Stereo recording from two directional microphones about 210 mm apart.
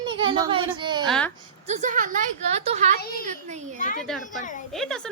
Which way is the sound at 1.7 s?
35° right (ahead or behind).